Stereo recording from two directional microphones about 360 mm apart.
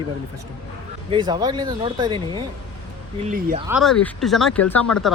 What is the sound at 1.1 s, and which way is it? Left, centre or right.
Speech, centre.